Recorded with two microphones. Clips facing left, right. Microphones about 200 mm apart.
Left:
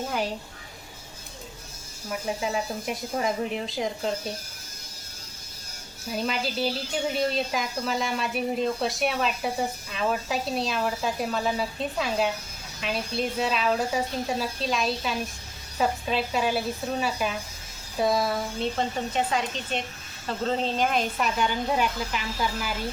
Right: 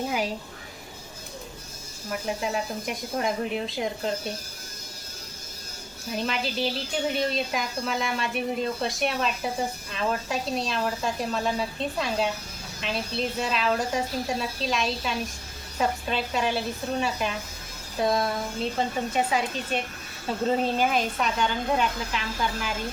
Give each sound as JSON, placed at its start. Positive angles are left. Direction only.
{"t": 2.0, "sound": "speech", "side_deg": 0}
{"t": 6.1, "sound": "speech", "side_deg": 0}